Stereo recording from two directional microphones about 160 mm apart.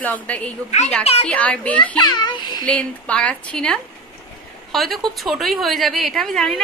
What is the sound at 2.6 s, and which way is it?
A woman's voice, 5° left (ahead or behind).